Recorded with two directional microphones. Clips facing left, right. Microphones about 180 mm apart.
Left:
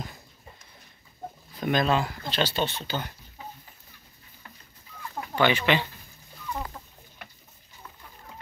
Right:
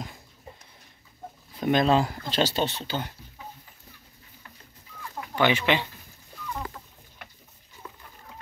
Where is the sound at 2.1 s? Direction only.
40° right (ahead or behind).